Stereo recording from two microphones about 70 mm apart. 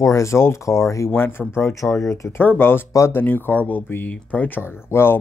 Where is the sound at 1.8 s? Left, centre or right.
Left.